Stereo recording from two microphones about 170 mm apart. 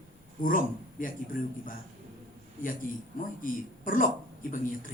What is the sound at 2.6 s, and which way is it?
Speech, 55° left (ahead or behind).